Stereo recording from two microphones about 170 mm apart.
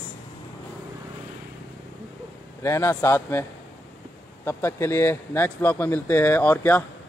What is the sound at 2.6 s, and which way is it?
Speech, 15° left (ahead or behind).